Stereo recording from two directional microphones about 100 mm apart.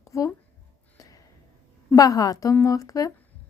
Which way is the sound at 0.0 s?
30° left (ahead or behind).